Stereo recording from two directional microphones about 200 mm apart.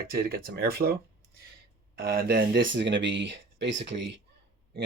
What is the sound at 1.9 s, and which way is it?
Speech, 50° right (ahead or behind).